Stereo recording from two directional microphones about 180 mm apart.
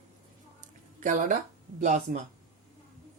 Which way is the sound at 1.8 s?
45° right (ahead or behind).